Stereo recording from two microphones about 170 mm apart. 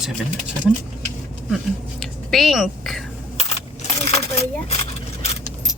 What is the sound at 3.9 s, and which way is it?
Coin, 40° left (ahead or behind).